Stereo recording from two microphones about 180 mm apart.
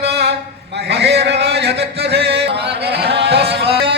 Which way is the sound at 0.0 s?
70° right (ahead or behind).